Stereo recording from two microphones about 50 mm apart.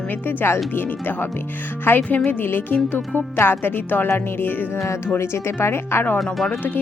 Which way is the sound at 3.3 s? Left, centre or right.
Left.